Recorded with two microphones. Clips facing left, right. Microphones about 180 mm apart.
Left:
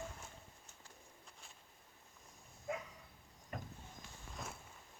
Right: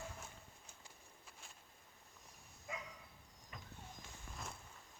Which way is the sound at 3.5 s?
55° left (ahead or behind).